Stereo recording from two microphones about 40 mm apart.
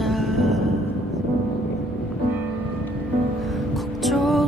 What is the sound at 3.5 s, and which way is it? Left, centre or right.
Music, centre.